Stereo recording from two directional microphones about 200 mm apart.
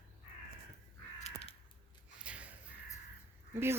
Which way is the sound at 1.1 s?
35° left (ahead or behind).